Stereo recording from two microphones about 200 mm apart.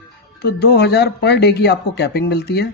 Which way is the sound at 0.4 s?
55° left (ahead or behind).